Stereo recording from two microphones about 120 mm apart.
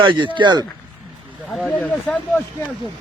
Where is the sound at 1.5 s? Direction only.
Centre (ahead or behind).